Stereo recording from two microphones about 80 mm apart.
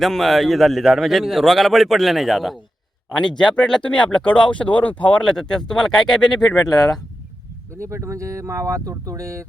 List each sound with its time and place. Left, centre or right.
0.0 s a man's voice: centre
3.1 s speech: centre
6.7 s speech: left
7.9 s speech: right